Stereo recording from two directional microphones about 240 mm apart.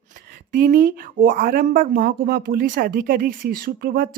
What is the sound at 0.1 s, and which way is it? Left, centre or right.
Speech, right.